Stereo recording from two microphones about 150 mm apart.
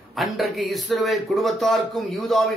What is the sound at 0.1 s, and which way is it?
A man's voice, centre (ahead or behind).